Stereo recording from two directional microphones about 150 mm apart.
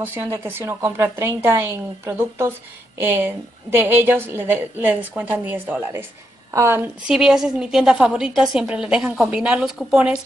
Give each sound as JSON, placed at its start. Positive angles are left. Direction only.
{"t": 0.0, "sound": "a woman's voice", "side_deg": -15}
{"t": 7.1, "sound": "a woman's voice", "side_deg": -5}